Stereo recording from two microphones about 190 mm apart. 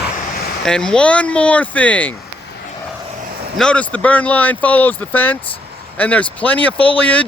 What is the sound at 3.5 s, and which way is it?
Speech, 5° left (ahead or behind).